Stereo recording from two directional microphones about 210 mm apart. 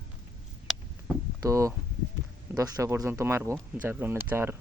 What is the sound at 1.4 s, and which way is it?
Speech, 15° right (ahead or behind).